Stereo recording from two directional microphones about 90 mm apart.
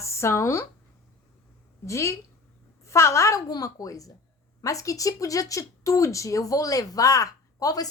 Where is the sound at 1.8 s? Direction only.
35° left (ahead or behind).